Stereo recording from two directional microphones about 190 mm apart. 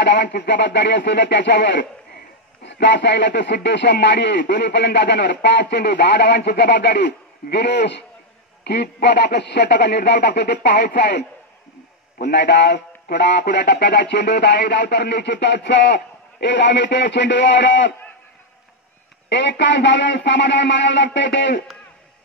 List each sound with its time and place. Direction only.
0.0 s speech: 65° left (ahead or behind)
19.2 s speech: 65° left (ahead or behind)